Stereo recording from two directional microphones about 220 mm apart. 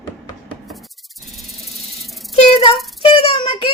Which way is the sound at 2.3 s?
25° left (ahead or behind).